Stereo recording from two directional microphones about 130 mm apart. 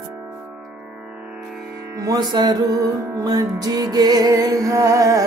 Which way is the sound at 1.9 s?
25° right (ahead or behind).